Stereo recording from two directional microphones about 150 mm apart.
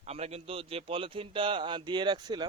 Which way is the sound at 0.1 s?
40° right (ahead or behind).